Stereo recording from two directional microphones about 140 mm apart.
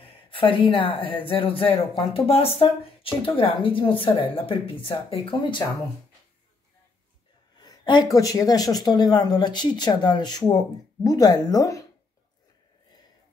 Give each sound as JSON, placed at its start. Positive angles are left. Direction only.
{"t": 0.0, "sound": "speech", "side_deg": 40}
{"t": 7.6, "sound": "speech", "side_deg": 30}